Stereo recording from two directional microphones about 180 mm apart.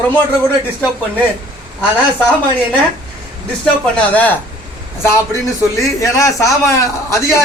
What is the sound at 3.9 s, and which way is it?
Speech, 10° left (ahead or behind).